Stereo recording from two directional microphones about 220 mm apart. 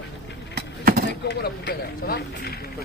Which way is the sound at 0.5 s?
45° right (ahead or behind).